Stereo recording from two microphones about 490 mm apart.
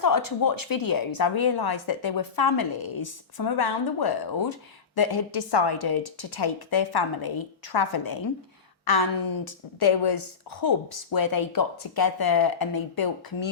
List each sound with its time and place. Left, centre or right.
0.0 s a woman's voice: left